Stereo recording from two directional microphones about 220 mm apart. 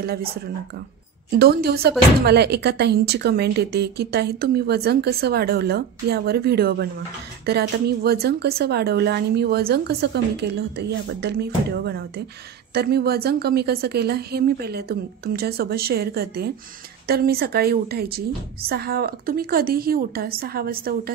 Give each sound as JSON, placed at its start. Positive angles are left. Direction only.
{"t": 0.0, "sound": "speech", "side_deg": -45}
{"t": 1.4, "sound": "speech", "side_deg": -45}